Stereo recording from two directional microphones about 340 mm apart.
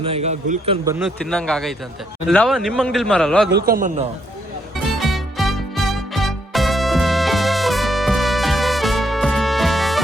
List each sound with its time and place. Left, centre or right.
0.0 s a man's voice: centre
0.9 s a man's voice: centre
3.5 s a man's voice: right
4.9 s music: centre